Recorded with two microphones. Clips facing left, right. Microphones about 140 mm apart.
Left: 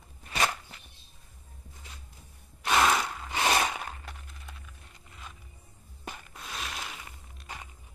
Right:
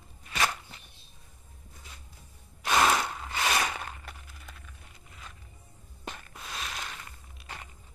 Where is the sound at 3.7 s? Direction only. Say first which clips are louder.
Left 1 dB; centre (ahead or behind).